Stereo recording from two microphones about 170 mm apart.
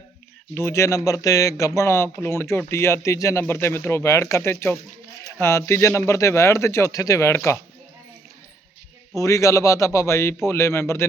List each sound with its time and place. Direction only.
0.5 s speech: 15° left (ahead or behind)
9.1 s speech: 20° left (ahead or behind)